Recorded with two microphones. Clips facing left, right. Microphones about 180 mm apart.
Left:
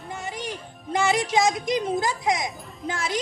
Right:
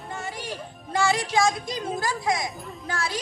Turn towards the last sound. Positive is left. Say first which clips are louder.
# left 2 dB
turn(degrees=20)  # may be behind; listen again after turning